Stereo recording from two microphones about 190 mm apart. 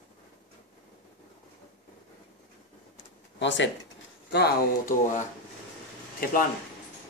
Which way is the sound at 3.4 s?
70° left (ahead or behind).